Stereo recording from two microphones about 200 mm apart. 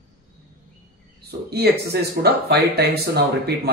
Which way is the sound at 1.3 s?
50° right (ahead or behind).